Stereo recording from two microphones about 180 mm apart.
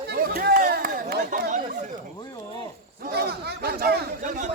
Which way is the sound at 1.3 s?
45° right (ahead or behind).